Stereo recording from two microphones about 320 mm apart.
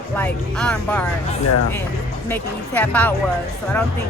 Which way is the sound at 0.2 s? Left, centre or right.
Centre.